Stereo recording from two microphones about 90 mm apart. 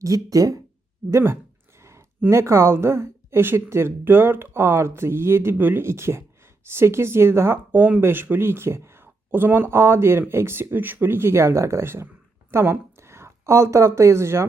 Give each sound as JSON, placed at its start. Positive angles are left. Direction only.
{"t": 0.0, "sound": "speech", "side_deg": -40}
{"t": 1.1, "sound": "speech", "side_deg": -30}
{"t": 1.8, "sound": "a sound", "side_deg": -30}
{"t": 2.3, "sound": "speech", "side_deg": -30}